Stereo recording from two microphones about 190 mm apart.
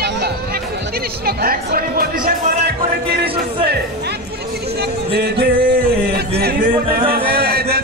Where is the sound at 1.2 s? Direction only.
50° right (ahead or behind).